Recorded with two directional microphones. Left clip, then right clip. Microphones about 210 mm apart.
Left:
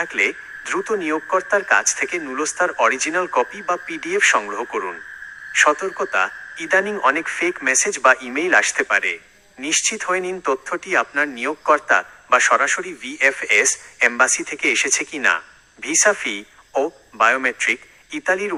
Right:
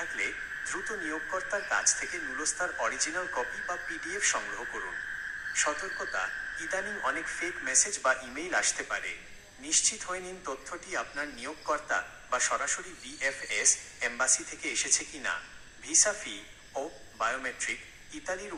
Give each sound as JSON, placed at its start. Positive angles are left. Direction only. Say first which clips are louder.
{"t": 0.0, "sound": "a man's voice", "louder": "left 13 dB", "side_deg": 40}